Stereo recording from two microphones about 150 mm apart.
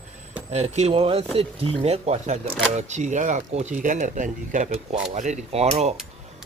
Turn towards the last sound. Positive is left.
turn(degrees=-45)  # may be behind; listen again after turning